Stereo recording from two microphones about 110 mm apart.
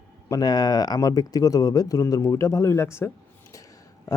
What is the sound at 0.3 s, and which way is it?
Speech, 35° left (ahead or behind).